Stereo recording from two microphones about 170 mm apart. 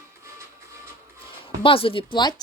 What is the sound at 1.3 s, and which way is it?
Speech, 30° left (ahead or behind).